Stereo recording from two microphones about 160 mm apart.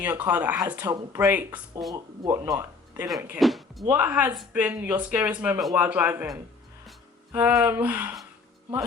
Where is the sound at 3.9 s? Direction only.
10° right (ahead or behind).